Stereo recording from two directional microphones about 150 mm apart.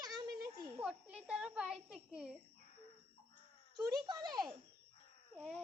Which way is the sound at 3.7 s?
25° right (ahead or behind).